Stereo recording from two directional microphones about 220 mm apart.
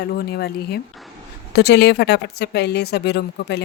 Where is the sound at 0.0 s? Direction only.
45° left (ahead or behind).